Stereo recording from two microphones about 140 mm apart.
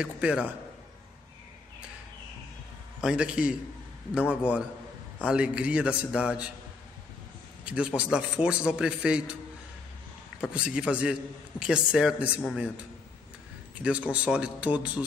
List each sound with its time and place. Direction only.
0.0 s a man's voice: 5° right (ahead or behind)
3.0 s a man's voice: 5° right (ahead or behind)
7.6 s a man's voice: 10° right (ahead or behind)
10.4 s a man's voice: 5° right (ahead or behind)
13.8 s a man's voice: 10° right (ahead or behind)